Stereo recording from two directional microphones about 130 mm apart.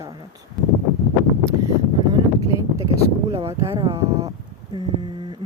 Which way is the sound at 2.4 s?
25° right (ahead or behind).